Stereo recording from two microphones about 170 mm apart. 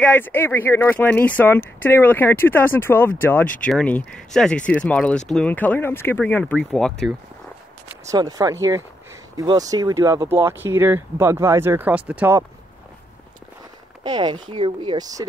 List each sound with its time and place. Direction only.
0.0 s speech: 10° left (ahead or behind)
8.1 s speech: 20° right (ahead or behind)
14.0 s speech: 25° right (ahead or behind)